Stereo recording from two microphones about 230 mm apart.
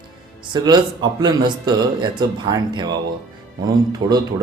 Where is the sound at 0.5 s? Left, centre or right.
Centre.